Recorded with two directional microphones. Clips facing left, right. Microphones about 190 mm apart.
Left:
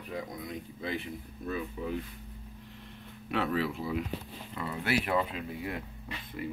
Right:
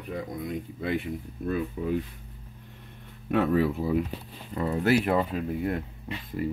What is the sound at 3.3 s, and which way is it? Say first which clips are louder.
Speech: right 7 dB; 45° right (ahead or behind).